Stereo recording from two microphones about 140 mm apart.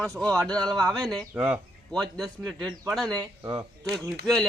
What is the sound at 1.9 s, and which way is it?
A man's voice, centre (ahead or behind).